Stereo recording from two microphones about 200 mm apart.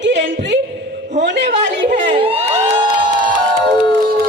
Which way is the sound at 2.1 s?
25° right (ahead or behind).